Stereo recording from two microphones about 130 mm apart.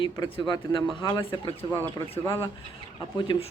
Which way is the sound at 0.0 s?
35° left (ahead or behind).